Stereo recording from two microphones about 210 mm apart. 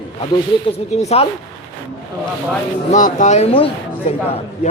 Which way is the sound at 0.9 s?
30° left (ahead or behind).